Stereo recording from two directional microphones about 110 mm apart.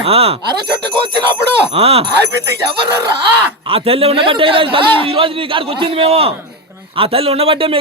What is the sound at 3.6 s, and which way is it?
A man's voice, 60° right (ahead or behind).